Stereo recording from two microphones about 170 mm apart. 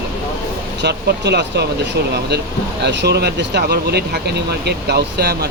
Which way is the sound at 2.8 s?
85° right.